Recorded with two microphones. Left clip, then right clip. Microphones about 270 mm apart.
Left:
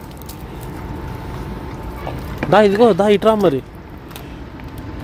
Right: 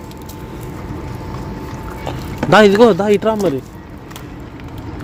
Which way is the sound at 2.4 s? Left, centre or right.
Centre.